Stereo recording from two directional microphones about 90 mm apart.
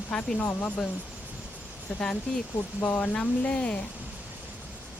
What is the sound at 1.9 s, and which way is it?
Speech, 5° left (ahead or behind).